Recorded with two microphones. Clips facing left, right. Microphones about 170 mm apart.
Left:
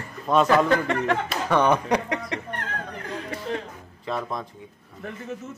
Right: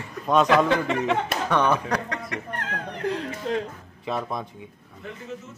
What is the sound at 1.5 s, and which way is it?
Speech, 15° left (ahead or behind).